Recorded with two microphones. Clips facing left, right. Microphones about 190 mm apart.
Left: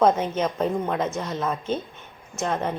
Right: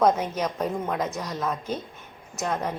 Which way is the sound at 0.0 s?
Centre (ahead or behind).